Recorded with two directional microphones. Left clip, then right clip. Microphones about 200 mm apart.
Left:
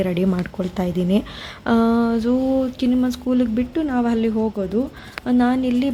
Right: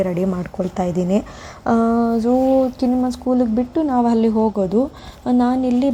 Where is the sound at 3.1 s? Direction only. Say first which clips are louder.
Right 3 dB; 5° right (ahead or behind).